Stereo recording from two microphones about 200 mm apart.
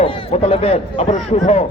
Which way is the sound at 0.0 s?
25° left (ahead or behind).